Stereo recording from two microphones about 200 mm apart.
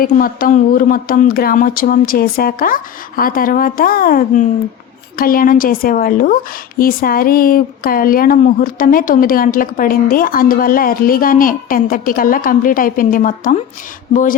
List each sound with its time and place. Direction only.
0.0 s speech: 45° left (ahead or behind)